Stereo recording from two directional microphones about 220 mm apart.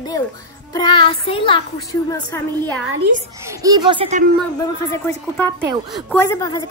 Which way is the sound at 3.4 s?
15° right (ahead or behind).